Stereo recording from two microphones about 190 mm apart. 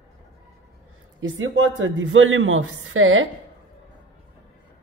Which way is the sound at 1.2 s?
85° right.